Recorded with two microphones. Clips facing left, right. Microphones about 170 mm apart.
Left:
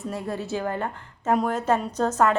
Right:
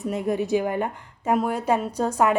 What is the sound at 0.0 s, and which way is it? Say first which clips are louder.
A woman's voice: right 5 dB; 20° right (ahead or behind).